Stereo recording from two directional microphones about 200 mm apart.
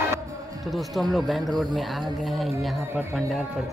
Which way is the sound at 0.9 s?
Centre (ahead or behind).